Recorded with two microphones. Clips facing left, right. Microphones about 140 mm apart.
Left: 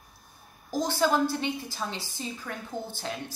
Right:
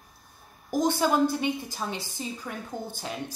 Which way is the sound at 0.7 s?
20° right (ahead or behind).